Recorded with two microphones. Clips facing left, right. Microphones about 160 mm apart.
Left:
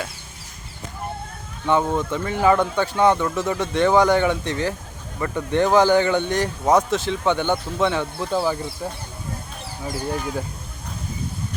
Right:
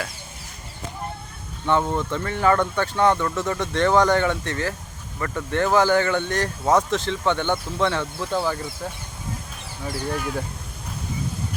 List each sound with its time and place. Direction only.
1.6 s speech: 10° left (ahead or behind)
9.8 s speech: 15° left (ahead or behind)